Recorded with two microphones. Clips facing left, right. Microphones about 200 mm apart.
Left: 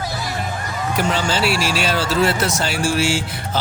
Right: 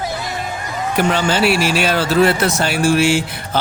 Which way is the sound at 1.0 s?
60° right (ahead or behind).